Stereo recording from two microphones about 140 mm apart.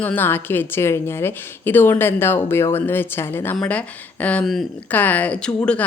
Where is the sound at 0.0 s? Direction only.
15° left (ahead or behind).